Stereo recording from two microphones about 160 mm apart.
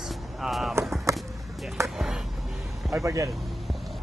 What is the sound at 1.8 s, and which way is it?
Speech, 15° right (ahead or behind).